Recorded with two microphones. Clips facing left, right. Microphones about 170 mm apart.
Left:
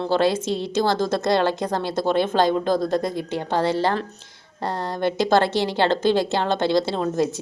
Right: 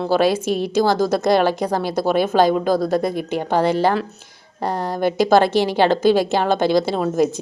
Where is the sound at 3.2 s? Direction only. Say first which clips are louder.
Right 4 dB; 15° right (ahead or behind).